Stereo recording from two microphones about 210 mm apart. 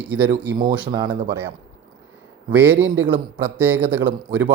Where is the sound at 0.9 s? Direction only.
20° right (ahead or behind).